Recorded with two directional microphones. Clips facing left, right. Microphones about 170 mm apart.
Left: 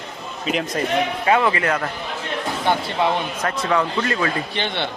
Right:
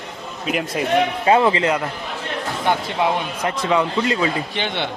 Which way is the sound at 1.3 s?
25° right (ahead or behind).